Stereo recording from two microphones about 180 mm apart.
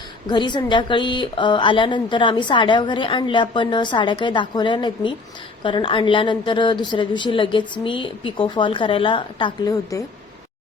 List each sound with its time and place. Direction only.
0.3 s a woman's voice: 25° left (ahead or behind)